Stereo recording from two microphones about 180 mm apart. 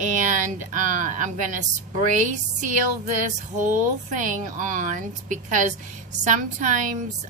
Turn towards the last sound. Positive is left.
turn(degrees=-45)  # may be behind; listen again after turning